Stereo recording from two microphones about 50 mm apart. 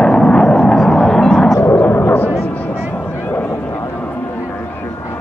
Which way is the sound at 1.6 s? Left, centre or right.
Left.